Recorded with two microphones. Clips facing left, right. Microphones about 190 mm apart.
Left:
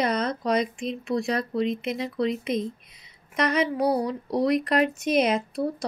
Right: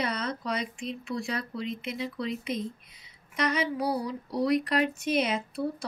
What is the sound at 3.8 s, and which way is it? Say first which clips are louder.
Speech: left 6 dB; 55° left (ahead or behind).